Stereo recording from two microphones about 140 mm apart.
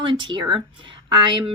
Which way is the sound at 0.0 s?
35° right (ahead or behind).